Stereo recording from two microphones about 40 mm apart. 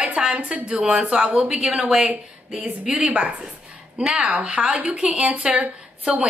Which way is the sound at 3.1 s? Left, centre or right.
Right.